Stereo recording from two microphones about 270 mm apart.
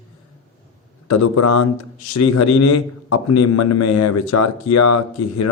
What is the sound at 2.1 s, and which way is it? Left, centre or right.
A man's voice, left.